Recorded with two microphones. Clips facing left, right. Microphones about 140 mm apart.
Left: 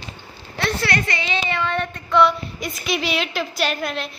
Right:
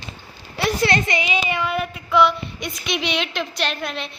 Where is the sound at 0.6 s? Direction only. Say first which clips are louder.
Right 3 dB; 10° right (ahead or behind).